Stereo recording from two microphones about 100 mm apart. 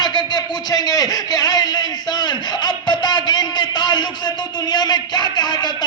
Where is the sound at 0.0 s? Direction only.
50° left (ahead or behind).